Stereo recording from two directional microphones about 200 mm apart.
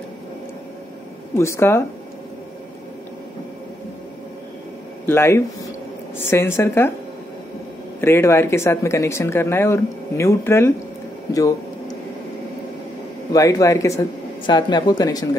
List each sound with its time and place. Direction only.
1.4 s speech: 15° left (ahead or behind)
5.0 s speech: 10° left (ahead or behind)
8.0 s speech: 10° left (ahead or behind)
13.3 s speech: 15° left (ahead or behind)